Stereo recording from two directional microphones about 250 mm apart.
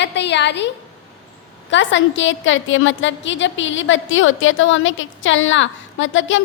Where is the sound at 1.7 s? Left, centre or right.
Left.